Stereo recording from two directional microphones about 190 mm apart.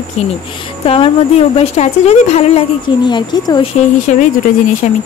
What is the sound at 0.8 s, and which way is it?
Speech, 30° left (ahead or behind).